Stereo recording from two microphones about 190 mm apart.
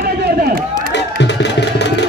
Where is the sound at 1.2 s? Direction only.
65° left (ahead or behind).